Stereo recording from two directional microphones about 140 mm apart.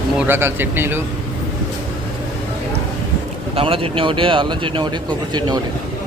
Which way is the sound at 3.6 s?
40° right (ahead or behind).